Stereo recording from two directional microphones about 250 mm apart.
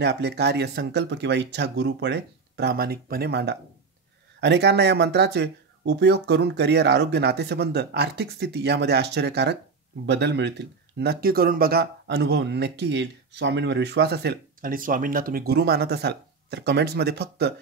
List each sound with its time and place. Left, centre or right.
0.0 s speech: right